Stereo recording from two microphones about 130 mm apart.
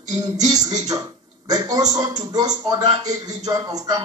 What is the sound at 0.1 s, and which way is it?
A man's voice, 30° right (ahead or behind).